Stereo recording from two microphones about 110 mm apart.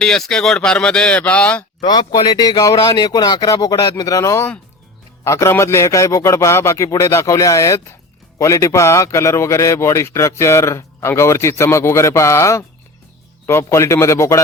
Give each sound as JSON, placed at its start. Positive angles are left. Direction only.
{"t": 0.0, "sound": "speech", "side_deg": 5}
{"t": 1.8, "sound": "a man's voice", "side_deg": 40}